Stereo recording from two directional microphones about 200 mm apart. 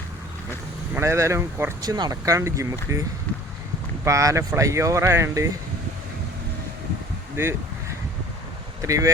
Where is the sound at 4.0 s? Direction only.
15° right (ahead or behind).